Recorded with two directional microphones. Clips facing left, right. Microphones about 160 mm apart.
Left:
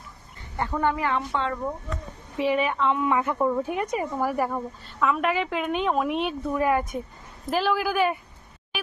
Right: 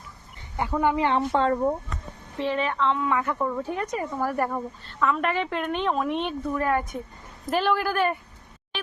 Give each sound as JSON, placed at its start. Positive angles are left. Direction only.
{"t": 0.7, "sound": "speech", "side_deg": -10}
{"t": 0.9, "sound": "speech", "side_deg": -25}
{"t": 1.3, "sound": "speech", "side_deg": -40}
{"t": 2.4, "sound": "a woman's voice", "side_deg": 10}
{"t": 4.3, "sound": "a woman's voice", "side_deg": 0}